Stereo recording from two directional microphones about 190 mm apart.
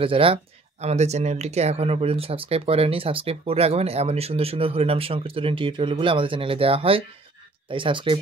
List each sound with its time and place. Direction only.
0.0 s speech: 30° right (ahead or behind)